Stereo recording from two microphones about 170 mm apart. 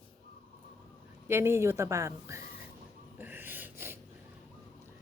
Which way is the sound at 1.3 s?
15° right (ahead or behind).